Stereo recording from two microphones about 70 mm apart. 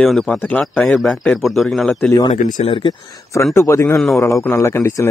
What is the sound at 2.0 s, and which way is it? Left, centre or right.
Speech, left.